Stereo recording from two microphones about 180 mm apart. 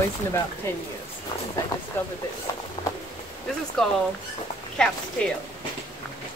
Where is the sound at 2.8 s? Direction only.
25° left (ahead or behind).